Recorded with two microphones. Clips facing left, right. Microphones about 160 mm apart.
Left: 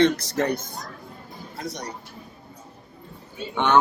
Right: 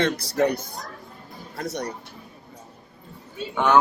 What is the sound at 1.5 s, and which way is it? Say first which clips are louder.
Speech: right 4 dB; 60° right (ahead or behind).